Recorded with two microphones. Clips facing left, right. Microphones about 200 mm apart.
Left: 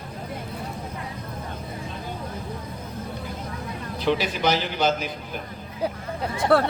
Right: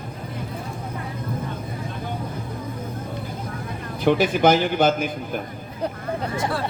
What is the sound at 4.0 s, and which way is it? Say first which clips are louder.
A man's voice: right 6 dB; 50° right (ahead or behind).